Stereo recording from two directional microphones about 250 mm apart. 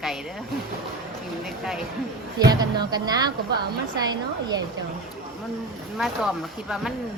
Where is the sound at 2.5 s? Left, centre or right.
Centre.